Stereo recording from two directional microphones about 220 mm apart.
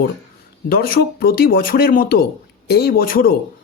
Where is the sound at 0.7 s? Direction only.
40° left (ahead or behind).